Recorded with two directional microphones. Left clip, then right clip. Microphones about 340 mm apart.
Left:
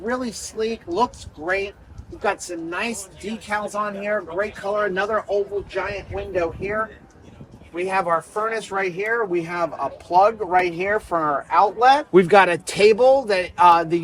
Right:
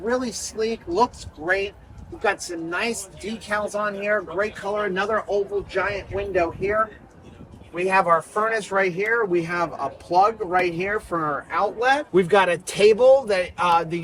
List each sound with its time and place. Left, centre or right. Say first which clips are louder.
0.0 s speech: right 1 dB; centre
0.5 s speech: even; centre
0.9 s speech: right 1 dB; centre
7.8 s speech: right 2 dB; centre
11.6 s speech: left 5 dB; centre